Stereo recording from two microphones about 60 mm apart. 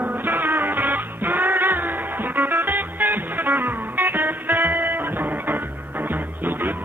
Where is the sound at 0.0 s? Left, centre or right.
Right.